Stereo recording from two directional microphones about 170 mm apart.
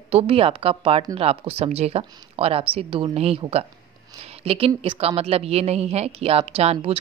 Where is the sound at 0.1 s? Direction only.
35° right (ahead or behind).